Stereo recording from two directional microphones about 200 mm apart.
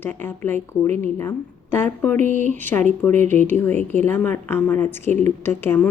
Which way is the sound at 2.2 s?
35° right (ahead or behind).